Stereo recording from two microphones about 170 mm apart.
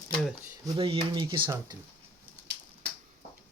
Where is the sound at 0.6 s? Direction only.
30° right (ahead or behind).